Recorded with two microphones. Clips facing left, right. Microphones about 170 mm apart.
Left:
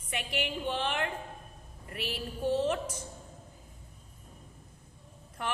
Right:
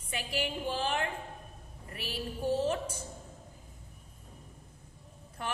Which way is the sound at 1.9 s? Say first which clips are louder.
Left 1 dB; 30° right (ahead or behind).